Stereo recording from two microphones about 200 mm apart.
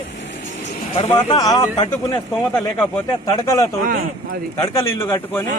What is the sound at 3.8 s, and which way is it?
Speech, 45° right (ahead or behind).